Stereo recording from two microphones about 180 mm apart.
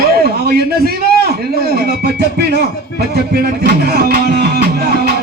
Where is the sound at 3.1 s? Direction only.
60° right (ahead or behind).